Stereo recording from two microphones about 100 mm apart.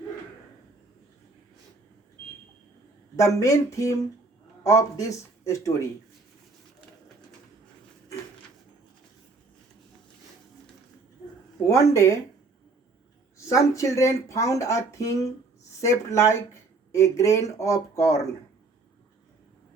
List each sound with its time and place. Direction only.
3.2 s speech: 30° left (ahead or behind)
11.6 s speech: 30° left (ahead or behind)
13.5 s speech: 35° left (ahead or behind)